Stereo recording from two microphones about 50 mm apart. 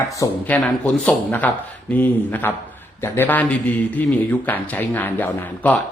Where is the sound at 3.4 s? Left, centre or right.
Left.